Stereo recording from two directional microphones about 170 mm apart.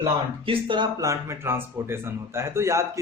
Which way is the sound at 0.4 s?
30° right (ahead or behind).